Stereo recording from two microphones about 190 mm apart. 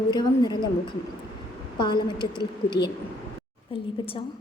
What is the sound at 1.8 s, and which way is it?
Speech, 25° left (ahead or behind).